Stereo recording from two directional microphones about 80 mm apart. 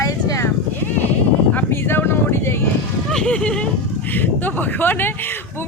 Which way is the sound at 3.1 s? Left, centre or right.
Centre.